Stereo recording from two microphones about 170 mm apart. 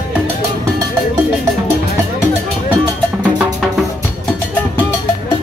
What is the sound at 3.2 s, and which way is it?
Music, 5° right (ahead or behind).